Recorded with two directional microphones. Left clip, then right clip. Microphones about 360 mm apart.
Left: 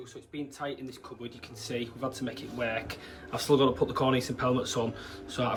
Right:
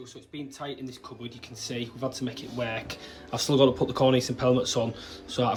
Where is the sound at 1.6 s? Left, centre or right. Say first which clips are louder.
Right 1 dB; centre.